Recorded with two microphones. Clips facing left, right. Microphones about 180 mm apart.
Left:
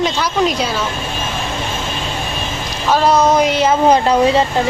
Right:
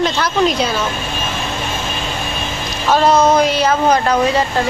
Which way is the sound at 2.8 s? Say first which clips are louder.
Right 1 dB; 5° left (ahead or behind).